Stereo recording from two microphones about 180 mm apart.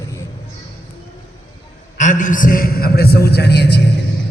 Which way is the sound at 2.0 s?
45° left (ahead or behind).